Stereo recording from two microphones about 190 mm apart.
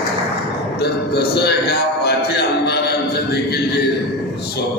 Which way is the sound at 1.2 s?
60° left (ahead or behind).